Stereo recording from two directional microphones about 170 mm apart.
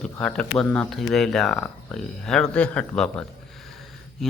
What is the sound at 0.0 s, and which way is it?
A man's voice, 5° left (ahead or behind).